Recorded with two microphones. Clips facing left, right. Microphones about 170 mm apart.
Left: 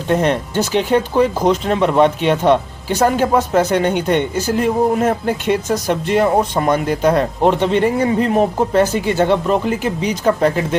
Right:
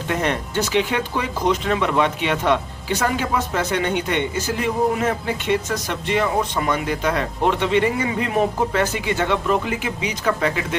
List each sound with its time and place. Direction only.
0.1 s speech: 35° left (ahead or behind)